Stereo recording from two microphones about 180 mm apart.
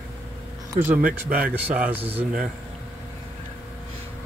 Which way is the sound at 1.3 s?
10° right (ahead or behind).